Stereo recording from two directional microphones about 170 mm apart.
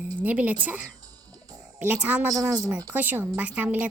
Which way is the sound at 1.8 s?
10° right (ahead or behind).